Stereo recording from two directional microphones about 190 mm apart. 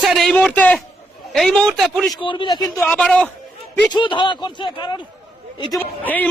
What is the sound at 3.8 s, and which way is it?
Speech, 25° left (ahead or behind).